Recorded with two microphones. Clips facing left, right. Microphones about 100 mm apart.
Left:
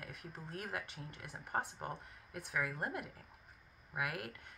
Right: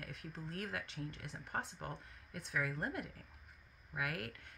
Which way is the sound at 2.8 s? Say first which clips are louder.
Even; 10° left (ahead or behind).